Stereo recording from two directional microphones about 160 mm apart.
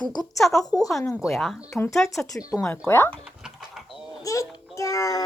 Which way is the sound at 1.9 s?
Centre (ahead or behind).